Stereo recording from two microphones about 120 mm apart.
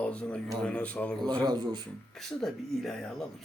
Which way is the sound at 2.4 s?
5° left (ahead or behind).